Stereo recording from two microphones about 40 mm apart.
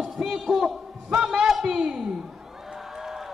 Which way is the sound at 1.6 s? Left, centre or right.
Right.